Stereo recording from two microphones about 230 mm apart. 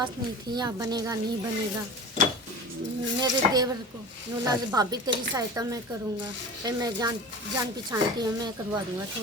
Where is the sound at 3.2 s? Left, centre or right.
Centre.